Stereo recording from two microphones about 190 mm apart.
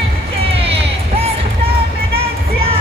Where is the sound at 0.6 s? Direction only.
30° right (ahead or behind).